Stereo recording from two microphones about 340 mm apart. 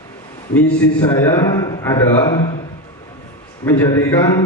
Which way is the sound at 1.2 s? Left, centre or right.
Centre.